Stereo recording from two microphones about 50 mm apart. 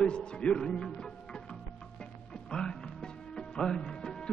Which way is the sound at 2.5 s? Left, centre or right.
Centre.